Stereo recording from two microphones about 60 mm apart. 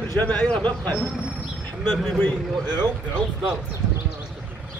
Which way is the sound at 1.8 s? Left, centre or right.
Centre.